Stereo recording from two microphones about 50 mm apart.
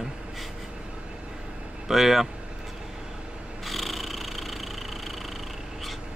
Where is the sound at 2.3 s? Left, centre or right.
Centre.